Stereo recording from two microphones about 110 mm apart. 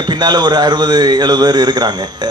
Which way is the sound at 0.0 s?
40° right (ahead or behind).